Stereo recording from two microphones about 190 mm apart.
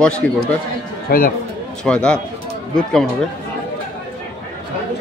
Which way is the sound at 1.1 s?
50° left (ahead or behind).